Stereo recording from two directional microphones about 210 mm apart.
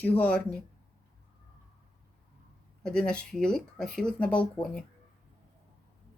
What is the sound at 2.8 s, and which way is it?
Speech, 5° left (ahead or behind).